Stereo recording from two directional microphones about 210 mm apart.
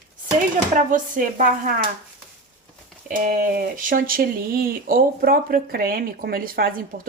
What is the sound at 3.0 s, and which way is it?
Speech, 40° right (ahead or behind).